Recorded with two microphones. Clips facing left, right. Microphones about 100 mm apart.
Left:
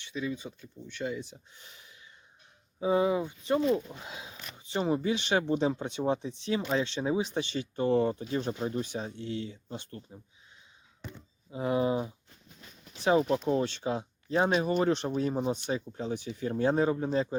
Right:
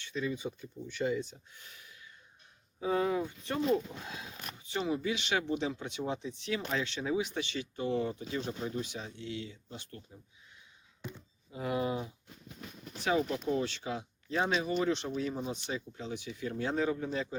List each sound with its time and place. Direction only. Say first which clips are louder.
0.3 s speech: right 4 dB; 5° right (ahead or behind)
1.5 s a sound: even; 25° left (ahead or behind)
2.8 s speech: left 4 dB; 15° left (ahead or behind)
4.6 s speech: left 4 dB; 35° left (ahead or behind)
7.9 s speech: left 7 dB; 45° left (ahead or behind)
11.5 s speech: left 5 dB; 25° left (ahead or behind)
14.5 s speech: left 4 dB; 45° left (ahead or behind)